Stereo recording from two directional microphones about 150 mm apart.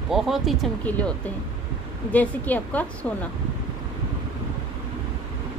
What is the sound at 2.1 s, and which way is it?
A woman's voice, 10° left (ahead or behind).